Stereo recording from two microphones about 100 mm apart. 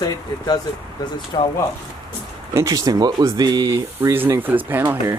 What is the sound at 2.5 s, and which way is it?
Speech, 35° right (ahead or behind).